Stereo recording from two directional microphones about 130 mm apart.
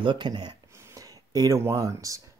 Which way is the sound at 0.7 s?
25° right (ahead or behind).